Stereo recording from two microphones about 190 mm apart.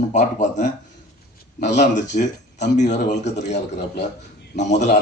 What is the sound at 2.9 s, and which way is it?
Speech, 65° left (ahead or behind).